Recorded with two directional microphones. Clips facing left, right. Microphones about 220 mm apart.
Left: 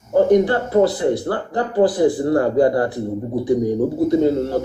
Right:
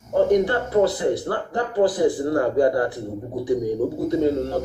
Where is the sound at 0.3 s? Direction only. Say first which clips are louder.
Left 4 dB; 35° left (ahead or behind).